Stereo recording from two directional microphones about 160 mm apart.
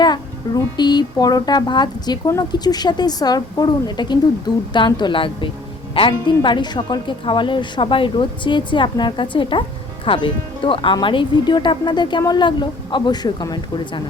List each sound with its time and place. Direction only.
0.0 s a woman's voice: 25° left (ahead or behind)